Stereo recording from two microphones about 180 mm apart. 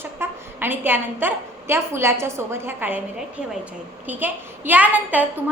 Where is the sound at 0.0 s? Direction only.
10° right (ahead or behind).